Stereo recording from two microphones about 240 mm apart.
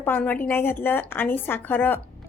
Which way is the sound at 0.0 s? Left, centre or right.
Centre.